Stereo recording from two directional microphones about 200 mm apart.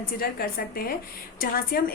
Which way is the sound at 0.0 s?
50° left (ahead or behind).